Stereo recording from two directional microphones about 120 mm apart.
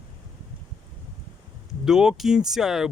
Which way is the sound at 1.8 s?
5° right (ahead or behind).